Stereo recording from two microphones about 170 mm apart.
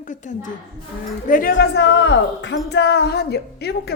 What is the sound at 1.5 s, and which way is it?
Speech, 90° left.